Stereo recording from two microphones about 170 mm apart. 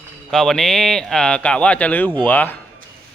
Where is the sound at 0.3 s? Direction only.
5° left (ahead or behind).